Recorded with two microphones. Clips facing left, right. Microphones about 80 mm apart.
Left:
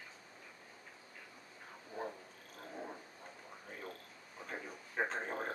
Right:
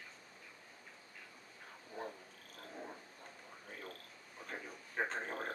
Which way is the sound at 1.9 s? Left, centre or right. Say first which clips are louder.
Left 3 dB; centre.